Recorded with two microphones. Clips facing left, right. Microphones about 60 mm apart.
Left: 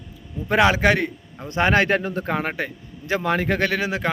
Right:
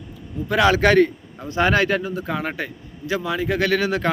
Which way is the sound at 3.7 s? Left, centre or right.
Centre.